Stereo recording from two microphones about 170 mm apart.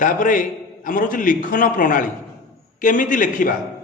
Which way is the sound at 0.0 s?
50° left (ahead or behind).